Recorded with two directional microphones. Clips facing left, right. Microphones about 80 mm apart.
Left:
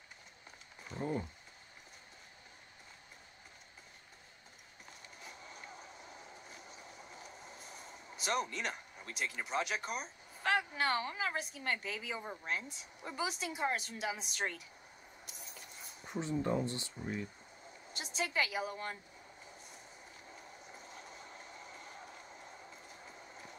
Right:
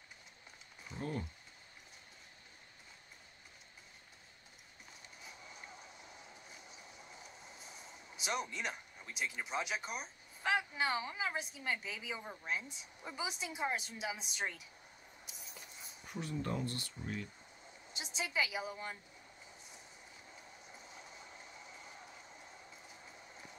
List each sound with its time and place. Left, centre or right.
0.9 s speech: centre
5.2 s vehicle: centre
8.5 s a sound: centre
9.4 s a woman's voice: centre
15.3 s a sound: centre
16.1 s speech: left
17.9 s a woman's voice: centre
20.2 s train: centre
22.4 s a sound: centre